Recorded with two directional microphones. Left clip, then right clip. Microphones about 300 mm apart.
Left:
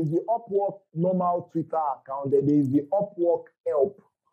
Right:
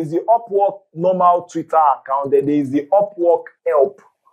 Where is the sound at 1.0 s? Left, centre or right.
Centre.